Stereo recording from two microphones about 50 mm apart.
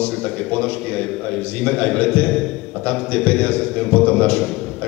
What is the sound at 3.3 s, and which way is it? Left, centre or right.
Speech, left.